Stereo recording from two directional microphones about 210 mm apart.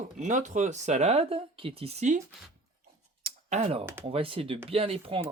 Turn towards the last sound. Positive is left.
turn(degrees=-25)  # may be behind; listen again after turning